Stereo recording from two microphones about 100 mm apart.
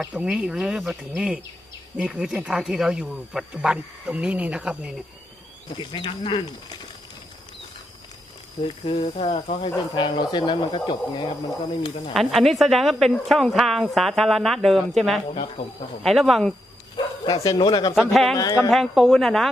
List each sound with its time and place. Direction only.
0.0 s speech: 10° right (ahead or behind)
1.1 s speech: 10° right (ahead or behind)
5.8 s speech: 50° left (ahead or behind)
8.5 s speech: 50° left (ahead or behind); by 9.6 s 70° left (ahead or behind)
9.6 s speech: 40° left (ahead or behind)
12.1 s speech: centre (ahead or behind)
16.9 s bow-wow: 50° left (ahead or behind)
17.6 s speech: 45° left (ahead or behind)
17.9 s speech: centre (ahead or behind)